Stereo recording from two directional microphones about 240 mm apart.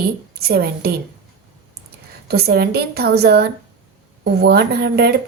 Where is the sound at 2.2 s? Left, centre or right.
Right.